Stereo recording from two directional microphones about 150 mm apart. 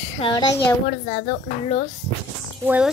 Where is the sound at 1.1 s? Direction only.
50° left (ahead or behind).